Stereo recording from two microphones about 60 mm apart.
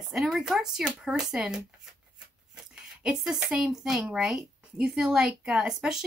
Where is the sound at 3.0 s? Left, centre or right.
Centre.